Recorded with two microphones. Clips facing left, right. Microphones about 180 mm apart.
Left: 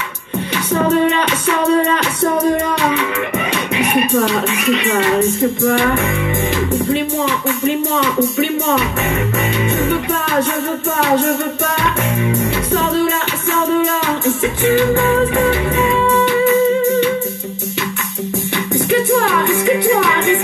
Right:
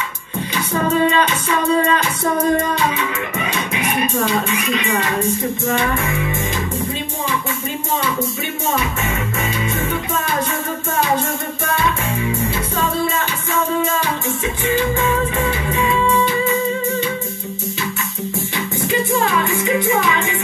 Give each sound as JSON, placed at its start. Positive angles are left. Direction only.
{"t": 1.2, "sound": "speech", "side_deg": 65}
{"t": 4.1, "sound": "speech", "side_deg": 65}
{"t": 5.6, "sound": "music", "side_deg": 60}
{"t": 11.0, "sound": "music", "side_deg": 65}
{"t": 14.6, "sound": "music", "side_deg": 65}
{"t": 18.9, "sound": "music", "side_deg": 60}